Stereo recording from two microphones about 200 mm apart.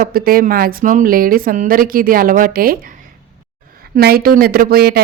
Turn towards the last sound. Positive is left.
turn(degrees=-50)  # may be behind; listen again after turning